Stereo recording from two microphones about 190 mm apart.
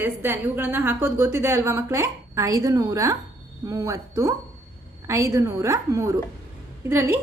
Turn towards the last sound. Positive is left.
turn(degrees=-15)  # may be behind; listen again after turning